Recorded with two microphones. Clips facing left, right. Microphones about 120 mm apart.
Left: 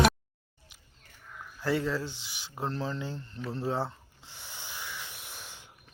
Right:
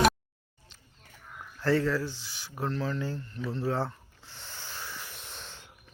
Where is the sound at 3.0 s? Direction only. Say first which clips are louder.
Right 3 dB; 25° left (ahead or behind); by 5.6 s 10° left (ahead or behind).